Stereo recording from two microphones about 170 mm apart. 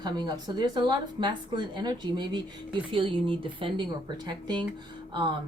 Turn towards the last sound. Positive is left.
turn(degrees=-25)  # may be behind; listen again after turning